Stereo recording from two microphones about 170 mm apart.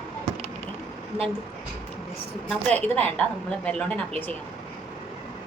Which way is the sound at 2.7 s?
10° left (ahead or behind).